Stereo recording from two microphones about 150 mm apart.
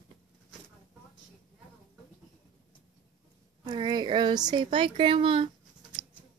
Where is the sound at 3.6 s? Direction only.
30° right (ahead or behind).